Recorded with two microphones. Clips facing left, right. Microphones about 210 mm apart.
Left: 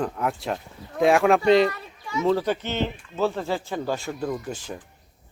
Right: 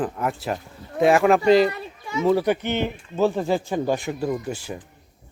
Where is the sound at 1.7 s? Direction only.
25° right (ahead or behind).